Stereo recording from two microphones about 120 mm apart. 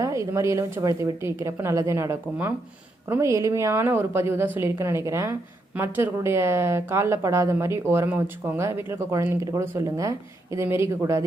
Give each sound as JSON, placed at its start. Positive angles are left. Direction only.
{"t": 0.0, "sound": "a woman's voice", "side_deg": -25}